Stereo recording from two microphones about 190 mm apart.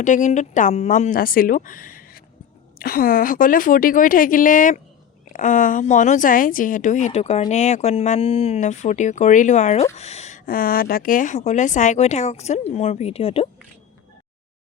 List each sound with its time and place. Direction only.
0.0 s a woman's voice: 40° left (ahead or behind)